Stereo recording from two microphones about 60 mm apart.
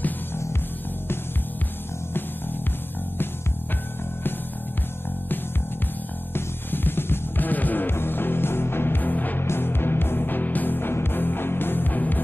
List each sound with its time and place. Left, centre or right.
6.3 s music: left